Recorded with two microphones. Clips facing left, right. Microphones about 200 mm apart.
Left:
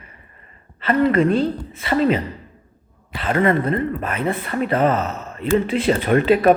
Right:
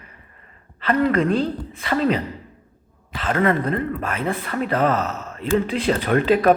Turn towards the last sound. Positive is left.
turn(degrees=5)  # may be behind; listen again after turning